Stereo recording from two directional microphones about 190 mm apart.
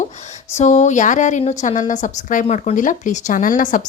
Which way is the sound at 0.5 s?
40° left (ahead or behind).